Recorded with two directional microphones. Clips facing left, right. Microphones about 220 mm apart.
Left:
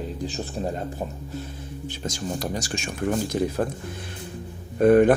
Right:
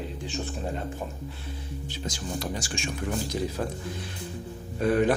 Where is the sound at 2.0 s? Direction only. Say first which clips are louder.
Left 4 dB; 45° left (ahead or behind).